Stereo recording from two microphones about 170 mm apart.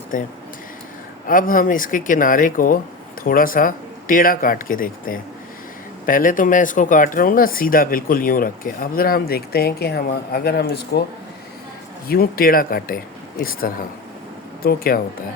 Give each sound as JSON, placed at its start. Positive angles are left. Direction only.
{"t": 0.1, "sound": "speech", "side_deg": 50}
{"t": 1.3, "sound": "speech", "side_deg": 55}
{"t": 12.0, "sound": "speech", "side_deg": 60}